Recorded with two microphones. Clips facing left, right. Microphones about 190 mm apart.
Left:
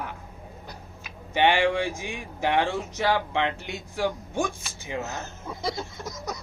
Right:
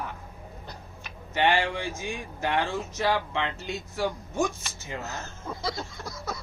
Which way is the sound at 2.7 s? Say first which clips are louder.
Left 2 dB; 15° left (ahead or behind).